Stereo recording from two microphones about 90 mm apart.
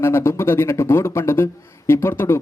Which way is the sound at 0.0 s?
30° left (ahead or behind).